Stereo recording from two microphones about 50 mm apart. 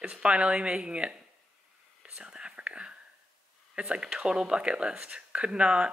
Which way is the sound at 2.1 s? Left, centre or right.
Centre.